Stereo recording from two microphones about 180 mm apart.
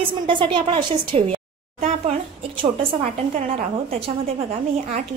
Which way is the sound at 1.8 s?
35° right (ahead or behind).